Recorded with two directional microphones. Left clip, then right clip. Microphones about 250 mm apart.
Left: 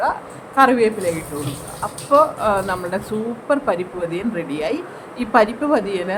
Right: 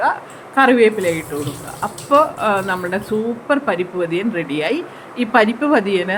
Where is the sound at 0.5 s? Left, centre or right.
Centre.